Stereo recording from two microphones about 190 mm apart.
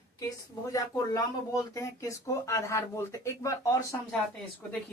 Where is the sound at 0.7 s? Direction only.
20° left (ahead or behind).